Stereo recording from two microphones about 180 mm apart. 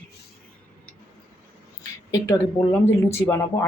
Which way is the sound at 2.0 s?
20° left (ahead or behind).